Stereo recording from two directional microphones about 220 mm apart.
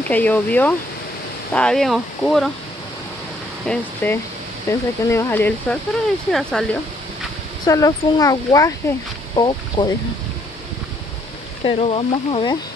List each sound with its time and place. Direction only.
0.1 s speech: 5° left (ahead or behind)
3.6 s speech: 5° left (ahead or behind)
7.6 s speech: 15° left (ahead or behind)
11.6 s speech: 25° left (ahead or behind)